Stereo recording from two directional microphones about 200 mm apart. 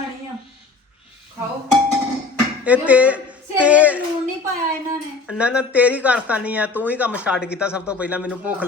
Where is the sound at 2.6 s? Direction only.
5° right (ahead or behind).